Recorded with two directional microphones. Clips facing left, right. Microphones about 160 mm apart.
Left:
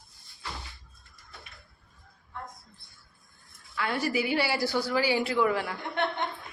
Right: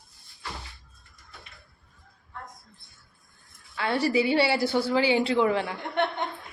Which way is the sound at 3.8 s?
30° right (ahead or behind).